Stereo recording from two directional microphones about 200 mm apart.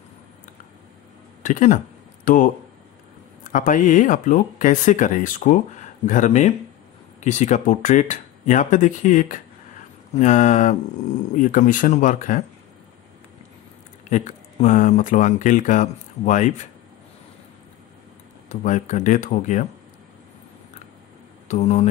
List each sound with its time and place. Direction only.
1.4 s speech: 40° left (ahead or behind)
14.1 s speech: 35° left (ahead or behind)
18.5 s speech: 40° left (ahead or behind)
21.5 s speech: 35° left (ahead or behind)